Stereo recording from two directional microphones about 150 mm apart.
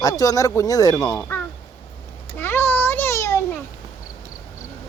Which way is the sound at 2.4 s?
15° left (ahead or behind).